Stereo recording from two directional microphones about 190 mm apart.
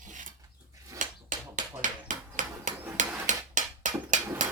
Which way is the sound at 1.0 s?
40° right (ahead or behind).